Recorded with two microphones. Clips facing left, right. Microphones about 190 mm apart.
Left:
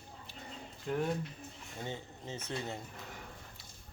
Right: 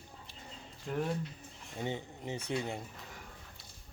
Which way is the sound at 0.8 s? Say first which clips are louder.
Left 1 dB; centre (ahead or behind).